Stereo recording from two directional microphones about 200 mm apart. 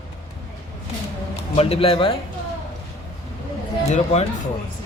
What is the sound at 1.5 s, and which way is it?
Speech, 30° left (ahead or behind).